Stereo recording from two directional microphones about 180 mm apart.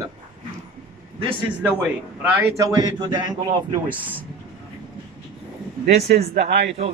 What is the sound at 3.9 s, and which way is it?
Speech, 10° right (ahead or behind).